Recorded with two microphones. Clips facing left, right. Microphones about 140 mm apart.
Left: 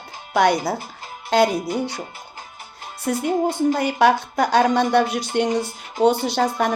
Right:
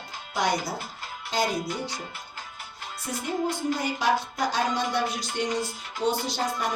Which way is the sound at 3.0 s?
65° left (ahead or behind).